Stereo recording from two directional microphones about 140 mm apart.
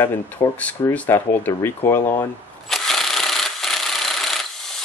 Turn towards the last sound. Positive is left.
turn(degrees=0)  # may be behind; listen again after turning